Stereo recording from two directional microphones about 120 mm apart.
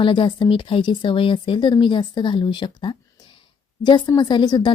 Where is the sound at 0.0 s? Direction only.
45° left (ahead or behind).